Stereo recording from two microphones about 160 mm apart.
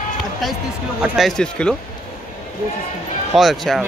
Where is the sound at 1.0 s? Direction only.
Centre (ahead or behind).